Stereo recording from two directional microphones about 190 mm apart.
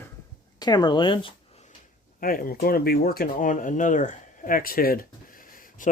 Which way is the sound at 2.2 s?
50° left (ahead or behind).